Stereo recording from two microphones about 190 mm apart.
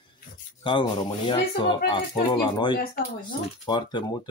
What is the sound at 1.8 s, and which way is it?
Speech, 25° left (ahead or behind).